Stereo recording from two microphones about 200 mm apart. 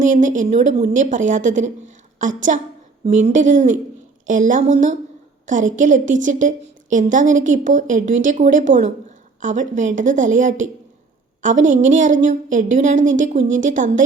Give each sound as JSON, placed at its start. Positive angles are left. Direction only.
{"t": 0.0, "sound": "a woman's voice", "side_deg": -40}